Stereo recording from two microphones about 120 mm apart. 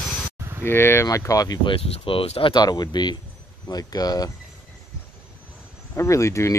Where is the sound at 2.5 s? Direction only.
35° left (ahead or behind).